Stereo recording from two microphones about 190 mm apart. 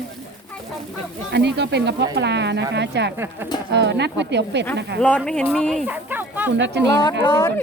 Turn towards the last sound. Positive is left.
turn(degrees=20)  # may be behind; listen again after turning